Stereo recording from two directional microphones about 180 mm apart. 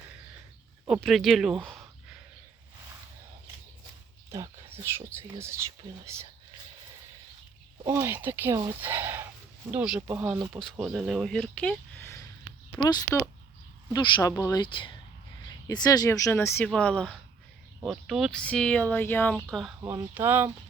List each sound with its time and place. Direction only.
0.9 s speech: centre (ahead or behind)
4.3 s speech: 15° right (ahead or behind)
7.9 s a woman's voice: 10° right (ahead or behind)
19.8 s speech: 15° right (ahead or behind)